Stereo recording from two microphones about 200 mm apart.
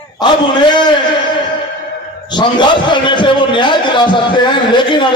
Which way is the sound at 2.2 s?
25° left (ahead or behind).